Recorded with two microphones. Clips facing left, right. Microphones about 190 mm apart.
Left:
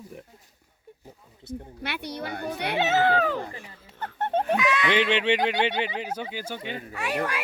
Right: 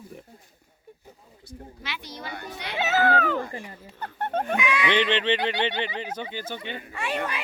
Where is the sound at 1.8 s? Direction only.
60° left (ahead or behind).